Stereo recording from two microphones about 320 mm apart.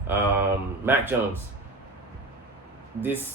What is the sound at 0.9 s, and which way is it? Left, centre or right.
Speech, centre.